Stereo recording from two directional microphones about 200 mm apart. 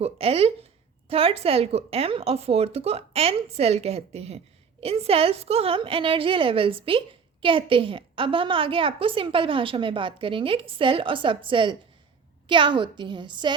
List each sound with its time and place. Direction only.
0.0 s a woman's voice: 30° right (ahead or behind)